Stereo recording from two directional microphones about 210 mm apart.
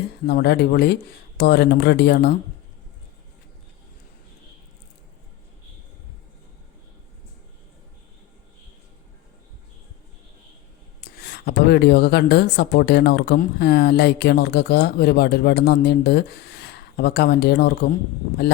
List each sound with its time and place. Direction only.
0.3 s speech: 50° left (ahead or behind)
11.0 s speech: 50° left (ahead or behind)